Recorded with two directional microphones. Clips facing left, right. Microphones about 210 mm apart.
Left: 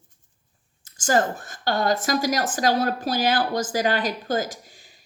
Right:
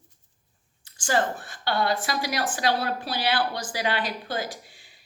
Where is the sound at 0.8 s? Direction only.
45° left (ahead or behind).